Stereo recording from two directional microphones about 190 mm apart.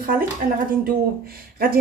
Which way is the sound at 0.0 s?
50° right (ahead or behind).